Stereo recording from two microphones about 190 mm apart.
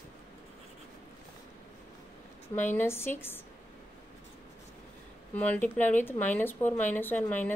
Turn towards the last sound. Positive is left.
turn(degrees=10)  # may be behind; listen again after turning